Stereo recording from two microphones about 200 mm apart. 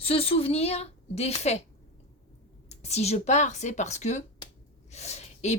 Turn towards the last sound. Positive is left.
turn(degrees=35)  # may be behind; listen again after turning